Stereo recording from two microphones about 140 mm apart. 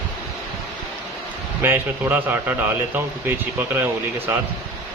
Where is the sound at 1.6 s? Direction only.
15° right (ahead or behind).